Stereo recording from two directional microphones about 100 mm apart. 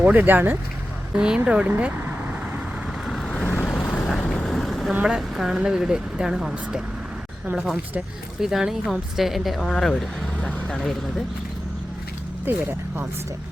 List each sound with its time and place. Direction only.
0.0 s speech: 15° right (ahead or behind)
1.1 s speech: 10° right (ahead or behind)
3.1 s vehicle: 5° left (ahead or behind)
3.4 s vehicle: 15° left (ahead or behind)
4.9 s a woman's voice: 10° right (ahead or behind)
12.5 s speech: 20° right (ahead or behind)